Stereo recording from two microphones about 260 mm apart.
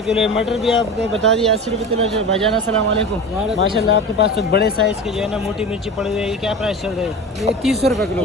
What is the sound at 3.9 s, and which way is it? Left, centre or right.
Speech, left.